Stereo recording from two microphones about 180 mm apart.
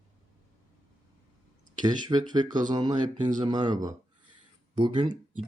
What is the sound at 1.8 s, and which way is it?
Speech, 25° right (ahead or behind).